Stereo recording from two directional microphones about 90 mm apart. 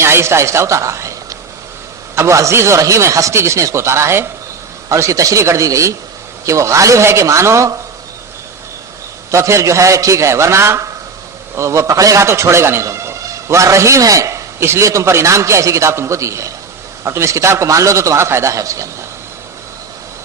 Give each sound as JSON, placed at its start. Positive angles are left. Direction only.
{"t": 0.0, "sound": "a man's voice", "side_deg": -30}
{"t": 9.3, "sound": "a man's voice", "side_deg": -35}